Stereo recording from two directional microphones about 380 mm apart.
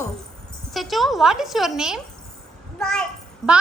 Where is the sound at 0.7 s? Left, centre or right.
Centre.